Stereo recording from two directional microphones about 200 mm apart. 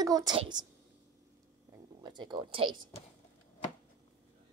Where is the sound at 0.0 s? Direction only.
20° right (ahead or behind).